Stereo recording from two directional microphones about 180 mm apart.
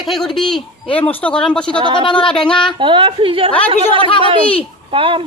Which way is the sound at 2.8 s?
25° right (ahead or behind).